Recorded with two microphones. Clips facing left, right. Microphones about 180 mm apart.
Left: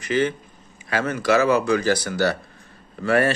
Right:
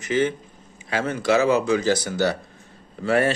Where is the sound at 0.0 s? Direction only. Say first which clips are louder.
Even; 25° right (ahead or behind).